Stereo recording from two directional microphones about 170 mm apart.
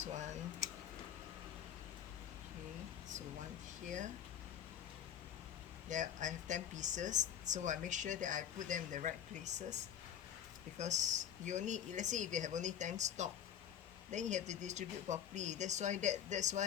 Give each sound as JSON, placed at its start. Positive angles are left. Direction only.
{"t": 0.0, "sound": "speech", "side_deg": -45}
{"t": 3.8, "sound": "speech", "side_deg": -50}
{"t": 5.9, "sound": "speech", "side_deg": -45}